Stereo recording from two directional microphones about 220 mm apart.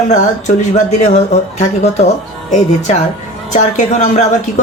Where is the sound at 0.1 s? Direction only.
35° left (ahead or behind).